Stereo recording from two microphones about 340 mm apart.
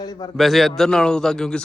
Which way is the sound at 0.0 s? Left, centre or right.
Centre.